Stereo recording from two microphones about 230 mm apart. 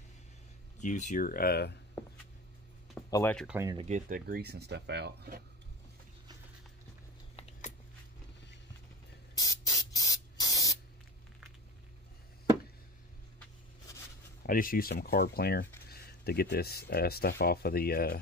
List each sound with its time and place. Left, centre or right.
0.7 s speech: left
3.1 s speech: centre
3.4 s speech: centre
3.7 s speech: right
7.3 s a sound: left
9.3 s spray: centre
14.4 s speech: left